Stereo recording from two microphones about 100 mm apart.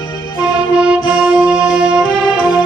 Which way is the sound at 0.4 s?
10° right (ahead or behind).